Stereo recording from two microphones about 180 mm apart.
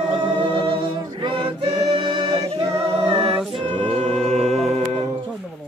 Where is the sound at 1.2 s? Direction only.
30° right (ahead or behind).